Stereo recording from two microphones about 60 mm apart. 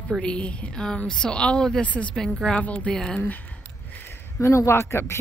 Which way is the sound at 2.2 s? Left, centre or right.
Centre.